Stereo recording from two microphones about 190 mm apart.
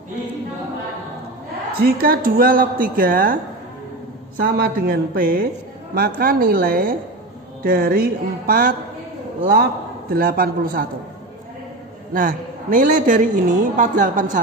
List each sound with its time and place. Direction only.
1.8 s a woman's voice: 50° right (ahead or behind)
4.4 s a woman's voice: 55° right (ahead or behind)
12.1 s a woman's voice: 45° right (ahead or behind)